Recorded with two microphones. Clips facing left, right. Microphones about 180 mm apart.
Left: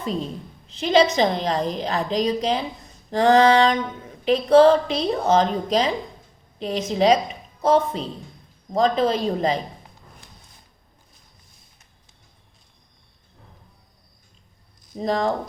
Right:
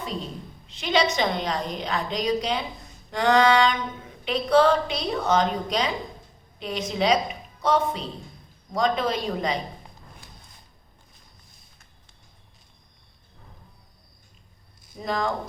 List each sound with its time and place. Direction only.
0.8 s a woman's voice: 40° left (ahead or behind)
14.9 s a woman's voice: 35° left (ahead or behind)